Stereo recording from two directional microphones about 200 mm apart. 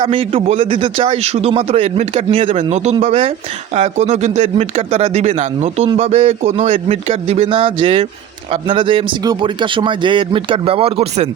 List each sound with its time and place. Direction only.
0.0 s a man's voice: 25° right (ahead or behind)